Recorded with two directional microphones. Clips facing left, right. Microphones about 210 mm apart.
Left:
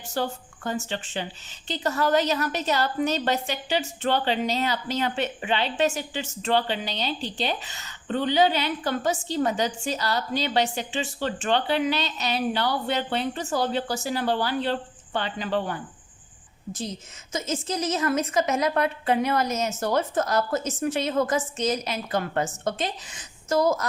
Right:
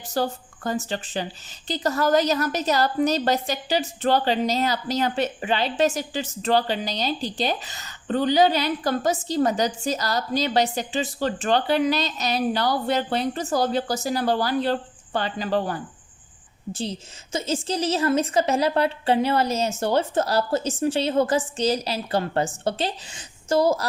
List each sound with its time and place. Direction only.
0.1 s speech: 40° right (ahead or behind)